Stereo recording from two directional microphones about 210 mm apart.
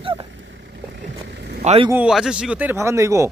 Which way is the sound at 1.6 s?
30° right (ahead or behind).